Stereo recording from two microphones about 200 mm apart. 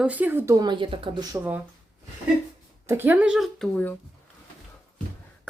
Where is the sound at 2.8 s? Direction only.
10° right (ahead or behind); by 3.9 s 5° left (ahead or behind).